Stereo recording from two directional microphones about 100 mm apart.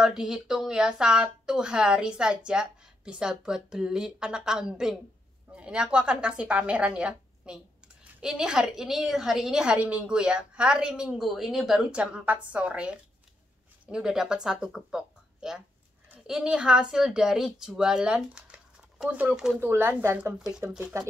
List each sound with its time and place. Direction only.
0.0 s a woman's voice: 5° right (ahead or behind)
19.6 s speech: 20° right (ahead or behind)